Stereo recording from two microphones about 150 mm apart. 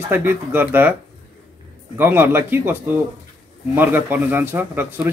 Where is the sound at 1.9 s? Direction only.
15° right (ahead or behind).